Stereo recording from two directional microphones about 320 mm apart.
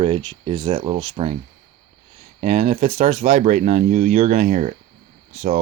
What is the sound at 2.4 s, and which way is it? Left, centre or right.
Speech, centre.